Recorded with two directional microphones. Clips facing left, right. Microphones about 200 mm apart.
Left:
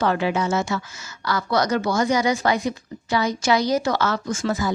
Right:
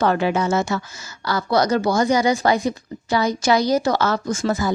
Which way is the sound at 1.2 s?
30° right (ahead or behind).